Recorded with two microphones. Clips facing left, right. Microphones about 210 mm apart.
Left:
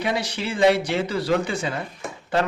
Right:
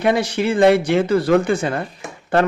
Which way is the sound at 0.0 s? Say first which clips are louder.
Right 8 dB; 55° right (ahead or behind).